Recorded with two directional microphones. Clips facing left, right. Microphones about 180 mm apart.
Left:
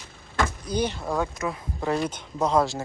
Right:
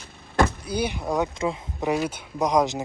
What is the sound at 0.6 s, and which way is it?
Speech, 10° right (ahead or behind).